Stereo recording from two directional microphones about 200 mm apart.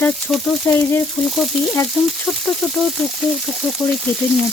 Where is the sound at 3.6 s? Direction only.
Centre (ahead or behind).